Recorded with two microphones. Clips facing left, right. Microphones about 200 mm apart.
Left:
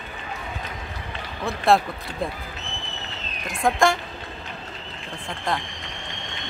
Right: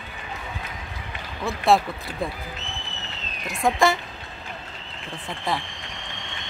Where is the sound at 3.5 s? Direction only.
Centre (ahead or behind).